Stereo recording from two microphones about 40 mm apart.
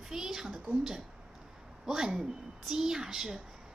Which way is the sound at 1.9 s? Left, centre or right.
Centre.